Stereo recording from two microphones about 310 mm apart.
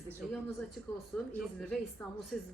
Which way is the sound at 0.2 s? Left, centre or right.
Centre.